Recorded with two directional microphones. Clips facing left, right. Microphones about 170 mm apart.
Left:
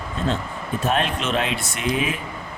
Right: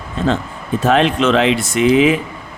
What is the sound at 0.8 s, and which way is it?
Speech, 90° right.